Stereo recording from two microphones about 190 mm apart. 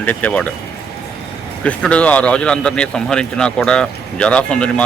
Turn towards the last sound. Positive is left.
turn(degrees=5)  # may be behind; listen again after turning